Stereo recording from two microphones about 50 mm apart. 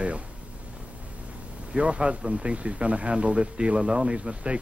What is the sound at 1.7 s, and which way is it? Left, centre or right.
Speech, right.